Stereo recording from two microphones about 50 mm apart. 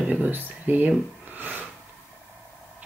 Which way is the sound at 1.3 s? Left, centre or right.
Right.